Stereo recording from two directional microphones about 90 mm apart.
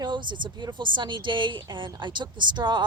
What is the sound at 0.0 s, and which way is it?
A woman's voice, 60° right (ahead or behind).